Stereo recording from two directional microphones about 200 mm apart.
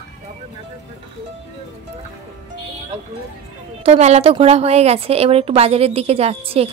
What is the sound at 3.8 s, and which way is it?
A woman's voice, 35° right (ahead or behind).